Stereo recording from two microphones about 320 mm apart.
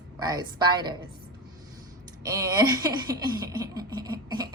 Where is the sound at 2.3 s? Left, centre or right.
Centre.